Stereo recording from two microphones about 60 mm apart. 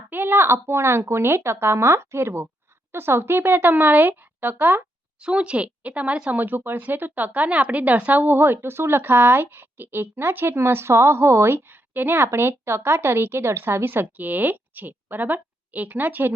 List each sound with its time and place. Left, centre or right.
0.1 s speech: right
5.2 s speech: centre
6.4 s speech: right